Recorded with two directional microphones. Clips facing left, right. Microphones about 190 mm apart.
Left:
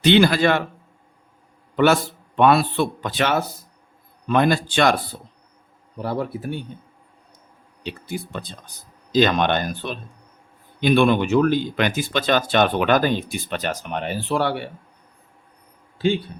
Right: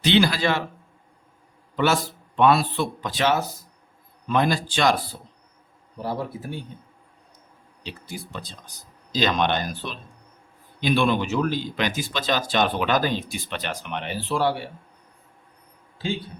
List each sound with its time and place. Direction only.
0.0 s speech: 55° left (ahead or behind)
1.7 s a man's voice: 55° left (ahead or behind)
6.0 s speech: 65° left (ahead or behind)
7.9 s speech: 55° left (ahead or behind)